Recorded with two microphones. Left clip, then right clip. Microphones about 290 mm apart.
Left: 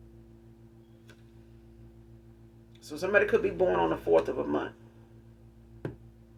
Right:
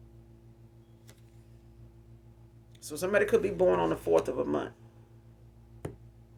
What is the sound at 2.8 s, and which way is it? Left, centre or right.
Speech, right.